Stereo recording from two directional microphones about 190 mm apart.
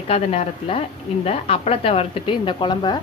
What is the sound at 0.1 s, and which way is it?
A woman's voice, 30° left (ahead or behind).